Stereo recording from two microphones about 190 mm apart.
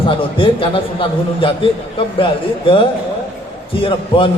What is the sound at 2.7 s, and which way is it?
A man's voice, 25° left (ahead or behind).